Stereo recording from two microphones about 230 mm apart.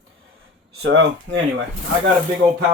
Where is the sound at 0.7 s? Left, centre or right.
Right.